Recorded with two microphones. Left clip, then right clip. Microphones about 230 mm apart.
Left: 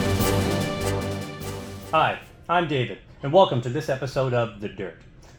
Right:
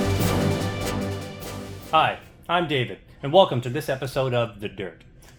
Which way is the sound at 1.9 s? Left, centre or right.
Right.